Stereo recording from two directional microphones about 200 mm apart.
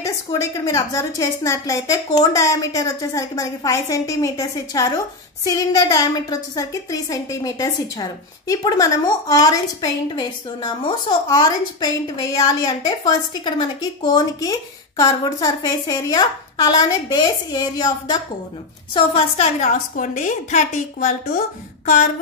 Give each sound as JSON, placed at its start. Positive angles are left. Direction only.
{"t": 0.0, "sound": "a woman's voice", "side_deg": 15}